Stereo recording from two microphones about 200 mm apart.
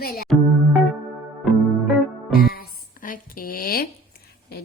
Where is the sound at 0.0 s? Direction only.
50° left (ahead or behind).